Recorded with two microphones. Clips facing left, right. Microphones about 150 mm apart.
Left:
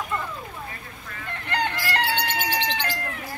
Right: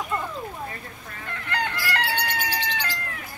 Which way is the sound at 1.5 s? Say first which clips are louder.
Left 2 dB; 20° left (ahead or behind).